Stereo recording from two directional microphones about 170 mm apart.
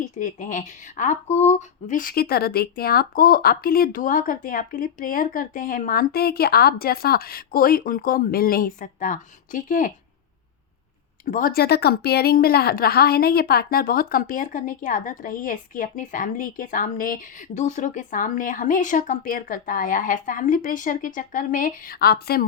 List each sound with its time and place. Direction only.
0.0 s speech: 50° left (ahead or behind)
11.3 s a woman's voice: 55° left (ahead or behind)